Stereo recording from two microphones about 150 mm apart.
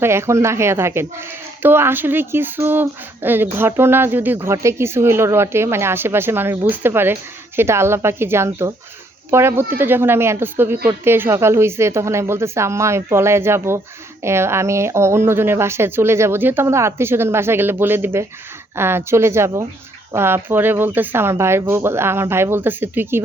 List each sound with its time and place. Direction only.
0.0 s speech: 15° right (ahead or behind)